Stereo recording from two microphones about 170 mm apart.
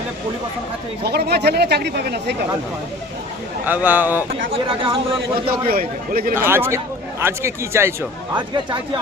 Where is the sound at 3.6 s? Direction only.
10° right (ahead or behind).